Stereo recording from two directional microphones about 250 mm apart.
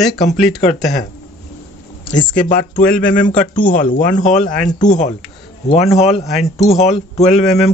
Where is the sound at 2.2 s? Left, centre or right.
Left.